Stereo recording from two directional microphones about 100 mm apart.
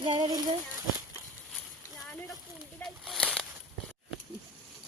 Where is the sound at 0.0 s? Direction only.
50° right (ahead or behind).